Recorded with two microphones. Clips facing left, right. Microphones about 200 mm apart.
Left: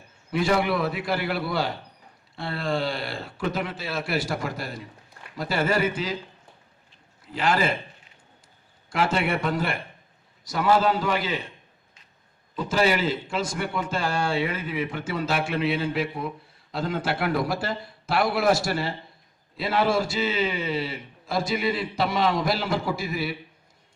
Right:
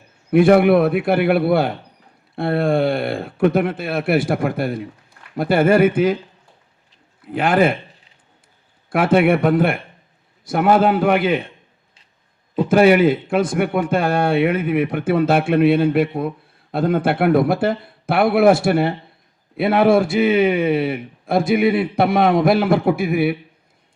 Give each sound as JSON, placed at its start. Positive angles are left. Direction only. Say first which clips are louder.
{"t": 0.3, "sound": "a man's voice", "louder": "right 11 dB", "side_deg": -60}
{"t": 7.3, "sound": "a man's voice", "louder": "right 8 dB", "side_deg": -60}
{"t": 8.9, "sound": "a man's voice", "louder": "right 10 dB", "side_deg": -55}
{"t": 12.5, "sound": "a man's voice", "louder": "right 10 dB", "side_deg": -55}